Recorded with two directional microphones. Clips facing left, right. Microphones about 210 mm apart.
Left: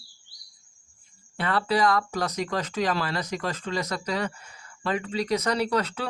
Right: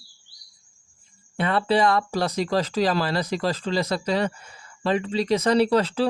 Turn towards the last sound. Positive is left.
turn(degrees=-30)  # may be behind; listen again after turning